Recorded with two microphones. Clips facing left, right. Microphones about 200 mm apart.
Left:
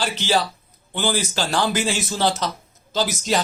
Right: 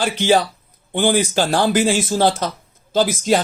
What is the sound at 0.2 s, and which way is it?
Speech, 55° right (ahead or behind).